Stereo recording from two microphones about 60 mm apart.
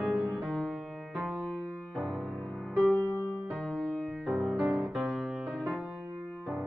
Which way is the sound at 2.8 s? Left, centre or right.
Left.